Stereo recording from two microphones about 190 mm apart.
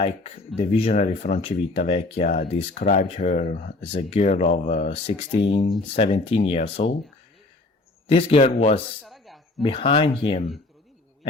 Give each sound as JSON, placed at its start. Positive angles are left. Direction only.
{"t": 0.0, "sound": "speech", "side_deg": 35}
{"t": 8.0, "sound": "speech", "side_deg": 30}
{"t": 9.0, "sound": "snake", "side_deg": 0}
{"t": 9.6, "sound": "speech", "side_deg": 30}